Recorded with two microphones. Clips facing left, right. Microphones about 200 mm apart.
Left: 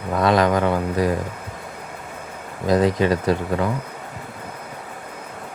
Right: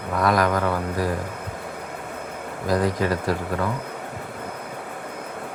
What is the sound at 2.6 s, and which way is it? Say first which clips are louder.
Speech: left 4 dB; 20° left (ahead or behind).